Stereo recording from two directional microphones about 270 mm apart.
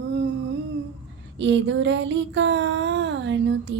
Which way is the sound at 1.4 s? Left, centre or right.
Right.